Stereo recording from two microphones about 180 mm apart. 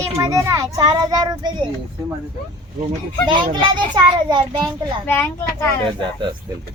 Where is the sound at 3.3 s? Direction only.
25° right (ahead or behind).